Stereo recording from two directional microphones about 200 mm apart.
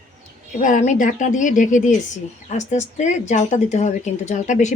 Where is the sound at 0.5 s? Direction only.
40° left (ahead or behind).